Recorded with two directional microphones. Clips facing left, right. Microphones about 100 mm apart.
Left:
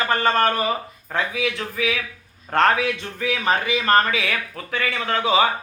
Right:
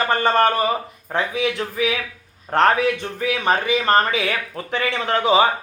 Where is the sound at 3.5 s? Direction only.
25° right (ahead or behind).